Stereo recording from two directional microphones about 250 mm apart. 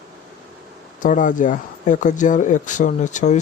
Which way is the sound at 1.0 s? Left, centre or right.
Left.